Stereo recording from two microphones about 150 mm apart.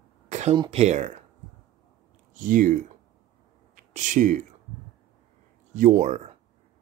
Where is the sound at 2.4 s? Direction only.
65° right (ahead or behind).